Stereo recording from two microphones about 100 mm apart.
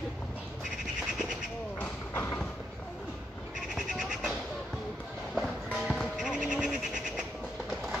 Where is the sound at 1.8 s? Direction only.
20° left (ahead or behind).